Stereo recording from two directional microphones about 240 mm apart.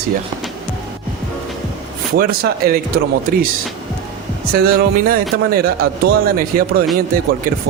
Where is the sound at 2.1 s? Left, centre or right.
Right.